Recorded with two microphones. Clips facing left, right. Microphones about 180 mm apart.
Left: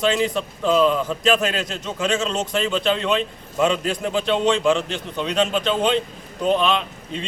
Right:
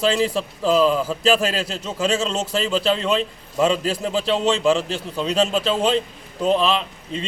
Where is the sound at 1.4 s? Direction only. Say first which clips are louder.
Right 1 dB; 30° right (ahead or behind).